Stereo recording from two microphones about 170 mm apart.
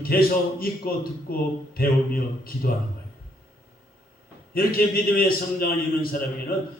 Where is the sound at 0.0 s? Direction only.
60° left (ahead or behind).